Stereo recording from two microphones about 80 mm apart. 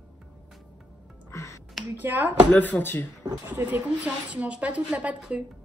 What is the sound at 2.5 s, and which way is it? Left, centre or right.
Speech, left.